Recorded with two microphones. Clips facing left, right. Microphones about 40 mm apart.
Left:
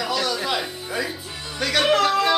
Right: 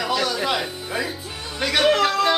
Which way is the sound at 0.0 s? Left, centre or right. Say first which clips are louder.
Right 2 dB; centre.